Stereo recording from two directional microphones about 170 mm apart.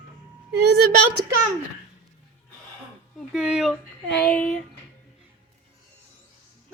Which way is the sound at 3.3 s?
5° right (ahead or behind).